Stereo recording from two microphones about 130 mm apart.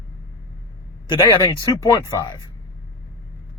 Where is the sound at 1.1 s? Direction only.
40° left (ahead or behind).